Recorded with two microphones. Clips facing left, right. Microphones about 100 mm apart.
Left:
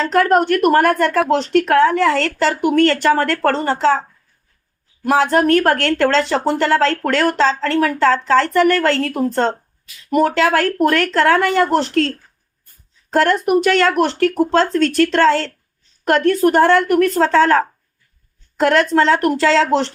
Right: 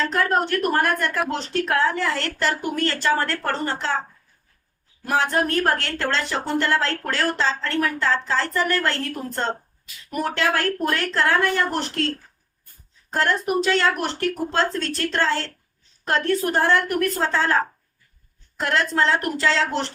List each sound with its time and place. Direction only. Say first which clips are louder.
0.1 s speech: left 8 dB; 80° left
1.3 s a woman's voice: left 9 dB; 75° left (ahead or behind)
5.0 s speech: left 8 dB; 90° left; by 6.1 s 70° left (ahead or behind)
6.1 s speech: left 8 dB; 90° left
13.1 s speech: left 7 dB; 85° left
16.0 s a woman's voice: left 8 dB; 65° left (ahead or behind); by 19.9 s 90° left